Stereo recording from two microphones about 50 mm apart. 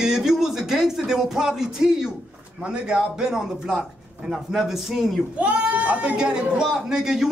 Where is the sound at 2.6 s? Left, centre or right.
Centre.